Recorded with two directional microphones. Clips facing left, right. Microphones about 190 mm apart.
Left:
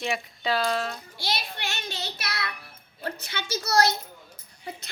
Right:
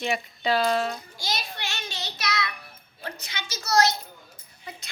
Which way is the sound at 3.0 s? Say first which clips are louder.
Left 3 dB; 55° left (ahead or behind).